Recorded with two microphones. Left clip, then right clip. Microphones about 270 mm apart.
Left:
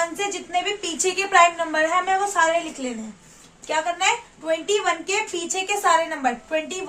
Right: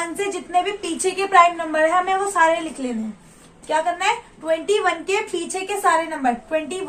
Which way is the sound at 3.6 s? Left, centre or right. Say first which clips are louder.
Right 2 dB; left.